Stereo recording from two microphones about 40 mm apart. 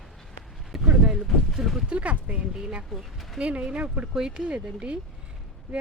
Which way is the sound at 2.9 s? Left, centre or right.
Centre.